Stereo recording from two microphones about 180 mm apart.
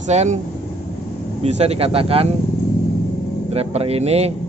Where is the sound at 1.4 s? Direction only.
35° right (ahead or behind).